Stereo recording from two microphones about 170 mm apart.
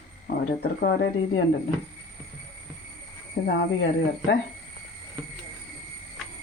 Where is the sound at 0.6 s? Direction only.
70° left (ahead or behind).